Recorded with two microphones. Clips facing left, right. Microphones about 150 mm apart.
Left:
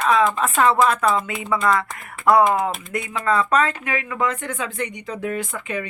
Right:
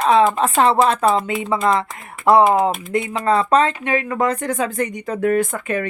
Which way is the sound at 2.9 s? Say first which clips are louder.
Right 2 dB; 25° right (ahead or behind).